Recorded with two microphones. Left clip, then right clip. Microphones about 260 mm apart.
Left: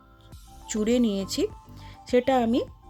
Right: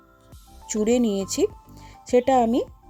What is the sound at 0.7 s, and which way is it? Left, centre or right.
Speech, centre.